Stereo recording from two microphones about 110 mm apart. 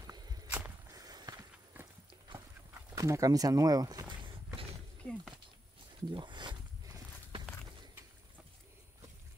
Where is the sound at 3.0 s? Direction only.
30° right (ahead or behind).